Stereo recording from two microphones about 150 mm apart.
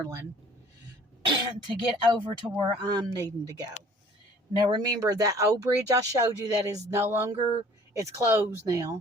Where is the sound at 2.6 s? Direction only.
25° right (ahead or behind).